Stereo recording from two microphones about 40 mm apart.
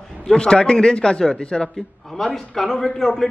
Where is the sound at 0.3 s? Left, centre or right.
Left.